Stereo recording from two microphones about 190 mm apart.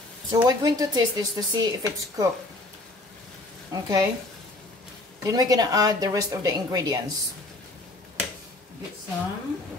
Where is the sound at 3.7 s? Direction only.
20° right (ahead or behind).